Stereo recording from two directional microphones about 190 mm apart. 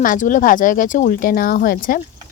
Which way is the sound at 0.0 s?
45° left (ahead or behind).